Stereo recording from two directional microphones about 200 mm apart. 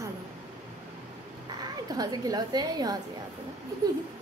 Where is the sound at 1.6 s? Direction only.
20° right (ahead or behind).